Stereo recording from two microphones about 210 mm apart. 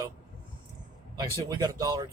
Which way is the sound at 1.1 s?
15° right (ahead or behind).